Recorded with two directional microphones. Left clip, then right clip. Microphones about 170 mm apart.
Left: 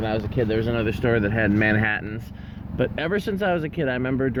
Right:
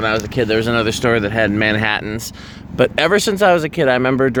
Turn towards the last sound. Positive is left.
turn(degrees=-35)  # may be behind; listen again after turning